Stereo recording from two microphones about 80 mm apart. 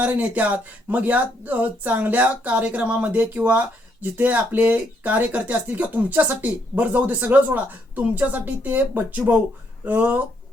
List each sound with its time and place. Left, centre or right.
0.0 s speech: centre